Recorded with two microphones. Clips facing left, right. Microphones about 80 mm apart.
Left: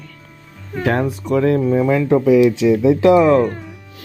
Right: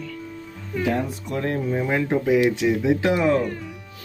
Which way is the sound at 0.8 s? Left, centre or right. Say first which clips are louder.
Left 5 dB; left.